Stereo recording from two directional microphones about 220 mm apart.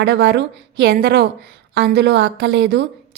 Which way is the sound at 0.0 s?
50° right (ahead or behind).